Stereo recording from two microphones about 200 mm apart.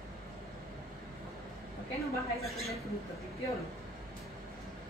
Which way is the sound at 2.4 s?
Centre (ahead or behind).